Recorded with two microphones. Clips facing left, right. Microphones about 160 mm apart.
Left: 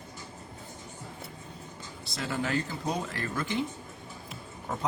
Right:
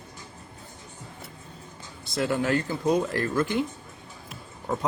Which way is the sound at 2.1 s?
55° right (ahead or behind).